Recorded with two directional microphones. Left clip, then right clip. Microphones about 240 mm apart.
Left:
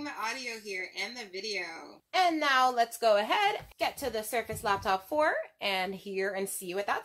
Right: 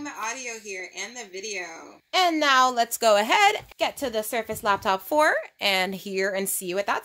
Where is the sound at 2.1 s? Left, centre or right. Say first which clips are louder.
Right 6 dB; right.